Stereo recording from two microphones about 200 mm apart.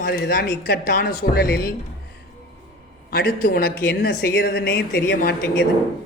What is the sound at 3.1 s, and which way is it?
Speech, 55° left (ahead or behind).